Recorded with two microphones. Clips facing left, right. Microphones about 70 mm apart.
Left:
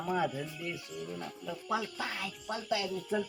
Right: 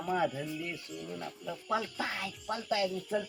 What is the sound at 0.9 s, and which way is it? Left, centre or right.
Mantra, left.